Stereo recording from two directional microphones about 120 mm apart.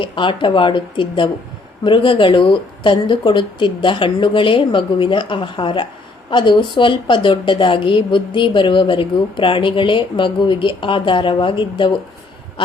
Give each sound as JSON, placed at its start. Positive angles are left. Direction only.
{"t": 0.0, "sound": "a woman's voice", "side_deg": 45}